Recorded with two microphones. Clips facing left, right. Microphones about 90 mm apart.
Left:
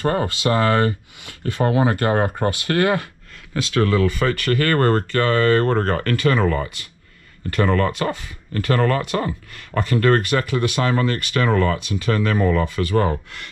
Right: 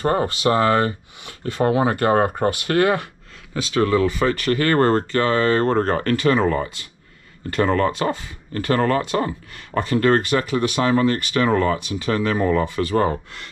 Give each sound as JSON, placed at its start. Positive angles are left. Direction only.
{"t": 0.0, "sound": "speech", "side_deg": -20}